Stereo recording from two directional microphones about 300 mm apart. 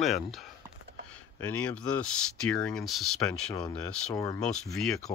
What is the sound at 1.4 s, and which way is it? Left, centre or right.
Speech, centre.